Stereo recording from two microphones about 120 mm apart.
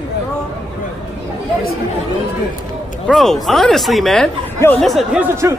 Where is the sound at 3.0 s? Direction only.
Centre (ahead or behind).